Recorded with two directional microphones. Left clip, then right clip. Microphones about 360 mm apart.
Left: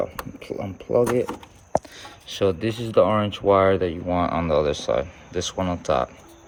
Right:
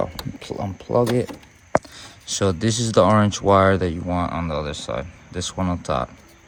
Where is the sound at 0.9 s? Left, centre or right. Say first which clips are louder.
Even; centre.